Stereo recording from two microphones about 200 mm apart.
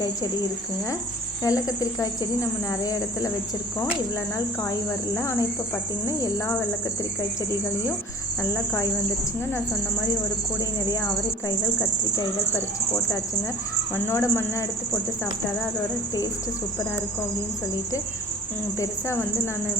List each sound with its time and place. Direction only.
1.5 s speech: 15° left (ahead or behind)
5.1 s speech: 15° left (ahead or behind)
8.4 s speech: 15° left (ahead or behind)
13.9 s speech: 15° left (ahead or behind)
18.8 s speech: 15° left (ahead or behind)